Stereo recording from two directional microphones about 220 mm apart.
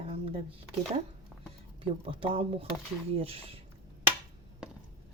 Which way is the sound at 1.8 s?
25° right (ahead or behind).